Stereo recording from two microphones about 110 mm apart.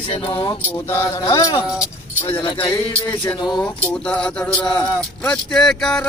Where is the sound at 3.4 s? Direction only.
40° left (ahead or behind).